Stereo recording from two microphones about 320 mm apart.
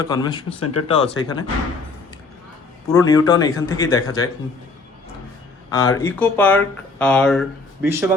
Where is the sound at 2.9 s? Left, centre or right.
Centre.